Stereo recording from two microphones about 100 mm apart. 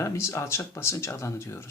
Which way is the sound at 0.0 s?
30° left (ahead or behind).